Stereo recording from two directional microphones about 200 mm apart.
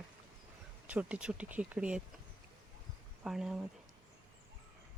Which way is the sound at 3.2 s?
Centre (ahead or behind).